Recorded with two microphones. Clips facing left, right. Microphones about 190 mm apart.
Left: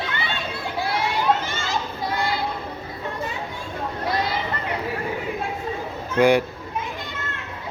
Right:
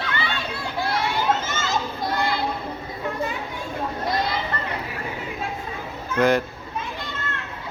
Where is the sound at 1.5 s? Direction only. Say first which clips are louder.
Right 1 dB; 20° right (ahead or behind).